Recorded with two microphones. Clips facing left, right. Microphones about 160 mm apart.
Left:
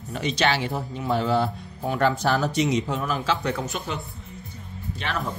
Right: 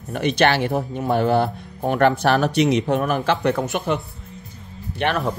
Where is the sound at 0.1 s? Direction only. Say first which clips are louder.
Right 5 dB; 60° right (ahead or behind).